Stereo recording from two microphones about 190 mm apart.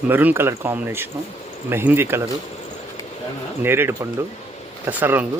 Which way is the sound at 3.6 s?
10° right (ahead or behind).